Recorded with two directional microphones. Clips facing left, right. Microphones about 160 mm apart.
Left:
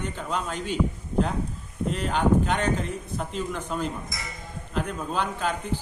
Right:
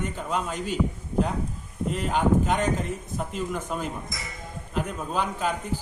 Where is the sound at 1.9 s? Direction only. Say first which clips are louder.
Even; 5° right (ahead or behind).